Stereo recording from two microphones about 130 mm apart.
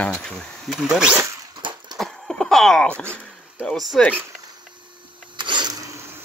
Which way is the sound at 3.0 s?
15° right (ahead or behind).